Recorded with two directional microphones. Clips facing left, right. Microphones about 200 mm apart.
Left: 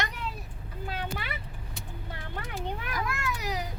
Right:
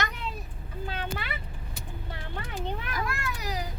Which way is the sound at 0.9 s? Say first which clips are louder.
Even; 10° left (ahead or behind).